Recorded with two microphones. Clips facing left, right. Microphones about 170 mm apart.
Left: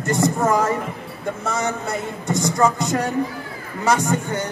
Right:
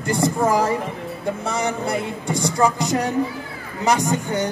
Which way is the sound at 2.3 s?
30° right (ahead or behind).